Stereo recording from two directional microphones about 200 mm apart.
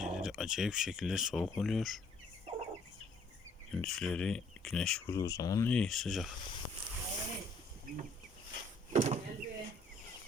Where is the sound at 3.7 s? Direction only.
Centre (ahead or behind).